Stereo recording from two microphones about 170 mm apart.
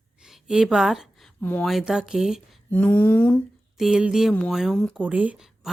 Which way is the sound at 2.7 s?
10° left (ahead or behind).